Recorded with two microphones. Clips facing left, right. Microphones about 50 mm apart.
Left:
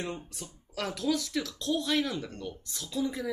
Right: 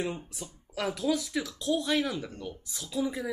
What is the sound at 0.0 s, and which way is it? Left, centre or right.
Speech, centre.